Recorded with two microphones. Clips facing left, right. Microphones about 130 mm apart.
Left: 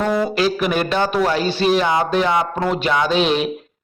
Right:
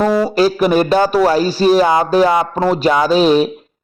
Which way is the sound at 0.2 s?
40° right (ahead or behind).